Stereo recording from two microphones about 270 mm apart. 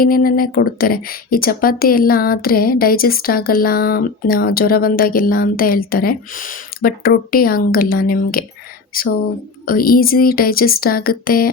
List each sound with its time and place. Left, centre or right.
0.0 s a woman's voice: left